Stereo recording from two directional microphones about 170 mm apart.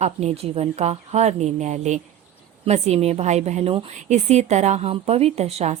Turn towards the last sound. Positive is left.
turn(degrees=-40)  # may be behind; listen again after turning